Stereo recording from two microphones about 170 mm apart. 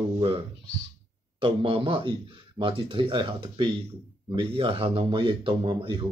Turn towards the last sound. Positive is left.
turn(degrees=-30)  # may be behind; listen again after turning